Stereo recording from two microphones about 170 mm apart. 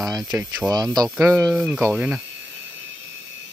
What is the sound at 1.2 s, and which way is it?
Speech, 15° right (ahead or behind).